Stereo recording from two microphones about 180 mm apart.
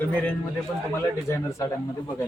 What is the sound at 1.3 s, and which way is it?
Speech, 15° left (ahead or behind).